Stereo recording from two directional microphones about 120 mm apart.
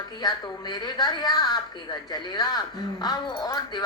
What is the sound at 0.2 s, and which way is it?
A woman's voice, 35° left (ahead or behind).